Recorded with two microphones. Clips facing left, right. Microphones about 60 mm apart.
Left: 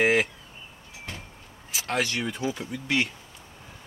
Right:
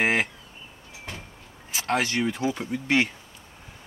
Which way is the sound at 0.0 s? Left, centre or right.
Right.